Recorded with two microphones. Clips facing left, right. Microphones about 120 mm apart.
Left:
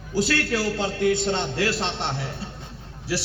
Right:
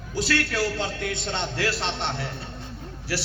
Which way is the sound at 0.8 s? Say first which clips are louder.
Left 7 dB; 35° left (ahead or behind).